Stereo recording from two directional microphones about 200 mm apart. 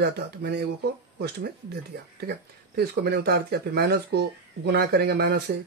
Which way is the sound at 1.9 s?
55° right (ahead or behind).